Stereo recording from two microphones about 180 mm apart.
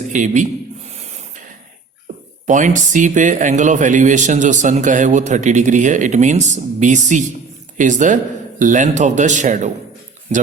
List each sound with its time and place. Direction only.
0.1 s speech: 45° right (ahead or behind)
0.9 s a sound: 40° right (ahead or behind)
2.5 s speech: 45° right (ahead or behind)